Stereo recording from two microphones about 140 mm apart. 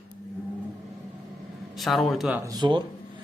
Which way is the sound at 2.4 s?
30° right (ahead or behind).